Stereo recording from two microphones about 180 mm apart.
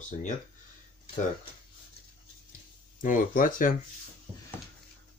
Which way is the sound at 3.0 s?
50° left (ahead or behind).